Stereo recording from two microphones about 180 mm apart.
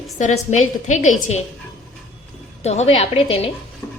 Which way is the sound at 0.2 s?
40° left (ahead or behind).